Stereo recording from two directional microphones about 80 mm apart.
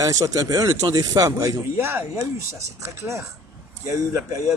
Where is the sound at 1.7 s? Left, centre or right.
Right.